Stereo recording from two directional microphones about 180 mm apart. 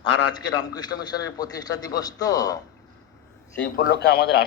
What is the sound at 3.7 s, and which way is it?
Speech, 60° left (ahead or behind).